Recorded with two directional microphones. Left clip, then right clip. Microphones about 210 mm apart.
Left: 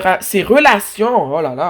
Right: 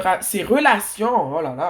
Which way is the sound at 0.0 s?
50° left (ahead or behind).